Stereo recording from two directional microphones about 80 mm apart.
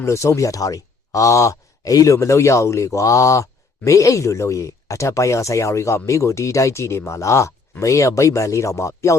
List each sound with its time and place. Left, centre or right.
0.0 s speech: left